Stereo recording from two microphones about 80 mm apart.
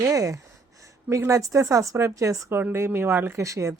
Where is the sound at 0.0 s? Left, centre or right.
Right.